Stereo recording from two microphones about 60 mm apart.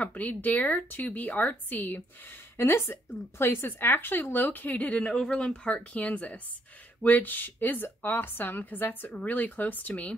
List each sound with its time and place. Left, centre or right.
0.0 s speech: left
2.5 s speech: left
5.1 s speech: centre